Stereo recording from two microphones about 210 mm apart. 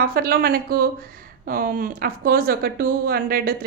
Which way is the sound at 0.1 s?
45° right (ahead or behind).